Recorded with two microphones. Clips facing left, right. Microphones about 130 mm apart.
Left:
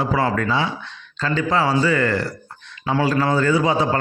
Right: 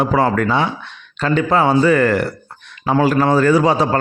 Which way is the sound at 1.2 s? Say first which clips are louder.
Right 5 dB; 60° right (ahead or behind).